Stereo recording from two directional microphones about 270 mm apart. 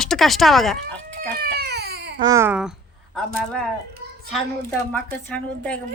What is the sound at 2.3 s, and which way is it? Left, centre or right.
Speech, centre.